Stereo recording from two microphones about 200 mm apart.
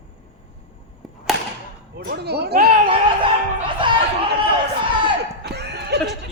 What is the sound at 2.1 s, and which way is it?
Speech, 55° right (ahead or behind).